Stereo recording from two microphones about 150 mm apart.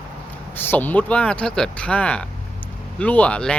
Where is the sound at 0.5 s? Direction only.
15° left (ahead or behind).